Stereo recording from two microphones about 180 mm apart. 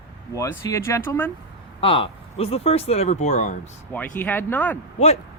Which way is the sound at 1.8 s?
30° left (ahead or behind).